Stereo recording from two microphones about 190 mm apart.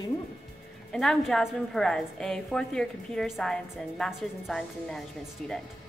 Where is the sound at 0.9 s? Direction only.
Centre (ahead or behind).